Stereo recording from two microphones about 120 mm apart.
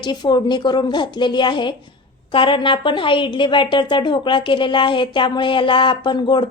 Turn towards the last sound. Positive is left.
turn(degrees=40)  # may be behind; listen again after turning